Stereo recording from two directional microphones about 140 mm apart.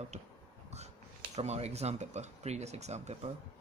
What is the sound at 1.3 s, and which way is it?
Speech, 50° right (ahead or behind).